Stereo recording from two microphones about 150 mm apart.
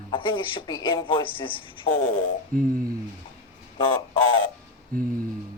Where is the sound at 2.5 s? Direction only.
65° right (ahead or behind).